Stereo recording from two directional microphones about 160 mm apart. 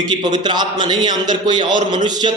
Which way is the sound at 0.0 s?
25° right (ahead or behind).